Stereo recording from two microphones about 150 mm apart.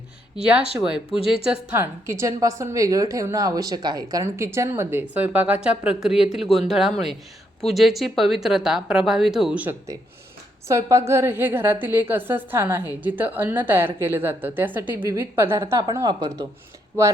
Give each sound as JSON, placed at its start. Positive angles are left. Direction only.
{"t": 0.8, "sound": "a woman's voice", "side_deg": -10}
{"t": 10.7, "sound": "a woman's voice", "side_deg": -20}